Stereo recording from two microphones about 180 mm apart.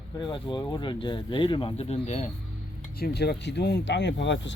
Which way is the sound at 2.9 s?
60° left (ahead or behind).